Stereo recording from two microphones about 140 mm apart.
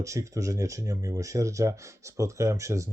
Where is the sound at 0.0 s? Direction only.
20° right (ahead or behind).